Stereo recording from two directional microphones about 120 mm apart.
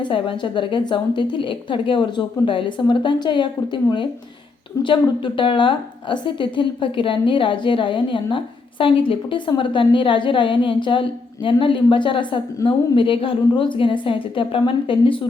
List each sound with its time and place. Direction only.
0.0 s a woman's voice: 45° left (ahead or behind)
4.8 s a woman's voice: 45° left (ahead or behind)